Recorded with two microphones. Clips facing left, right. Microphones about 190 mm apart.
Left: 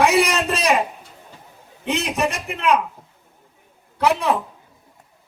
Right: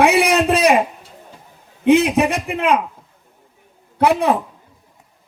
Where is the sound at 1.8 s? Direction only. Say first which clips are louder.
Right 9 dB; 60° right (ahead or behind).